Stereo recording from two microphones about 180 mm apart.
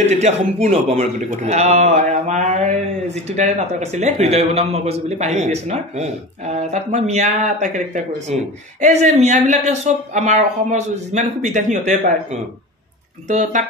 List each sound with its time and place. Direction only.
0.1 s speech: 35° right (ahead or behind)